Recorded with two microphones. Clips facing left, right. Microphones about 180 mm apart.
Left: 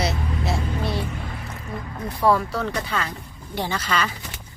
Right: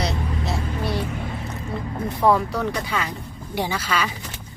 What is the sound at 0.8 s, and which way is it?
Vehicle, 15° right (ahead or behind).